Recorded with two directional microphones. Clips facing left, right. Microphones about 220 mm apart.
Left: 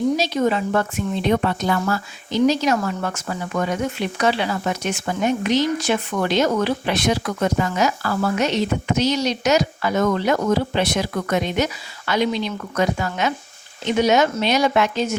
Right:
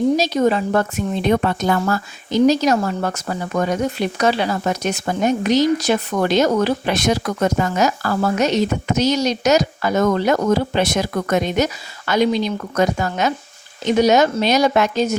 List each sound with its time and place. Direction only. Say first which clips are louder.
0.2 s speech: right 3 dB; 40° right (ahead or behind)